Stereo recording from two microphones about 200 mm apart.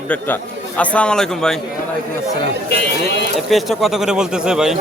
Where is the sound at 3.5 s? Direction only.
Centre (ahead or behind).